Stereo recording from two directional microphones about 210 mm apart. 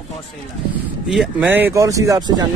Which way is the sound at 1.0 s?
Centre (ahead or behind).